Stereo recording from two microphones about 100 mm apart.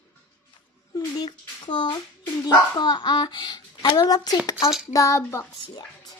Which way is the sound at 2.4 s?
45° left (ahead or behind).